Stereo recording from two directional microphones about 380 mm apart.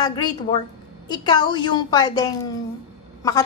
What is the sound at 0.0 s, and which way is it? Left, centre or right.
A woman's voice, centre.